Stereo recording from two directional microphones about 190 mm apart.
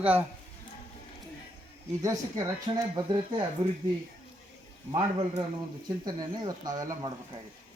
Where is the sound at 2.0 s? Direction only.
15° right (ahead or behind).